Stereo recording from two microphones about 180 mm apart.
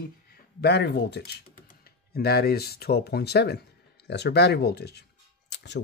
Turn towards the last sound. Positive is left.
turn(degrees=70)  # may be behind; listen again after turning